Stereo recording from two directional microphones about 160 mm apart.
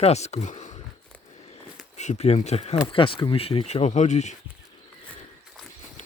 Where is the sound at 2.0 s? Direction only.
45° left (ahead or behind).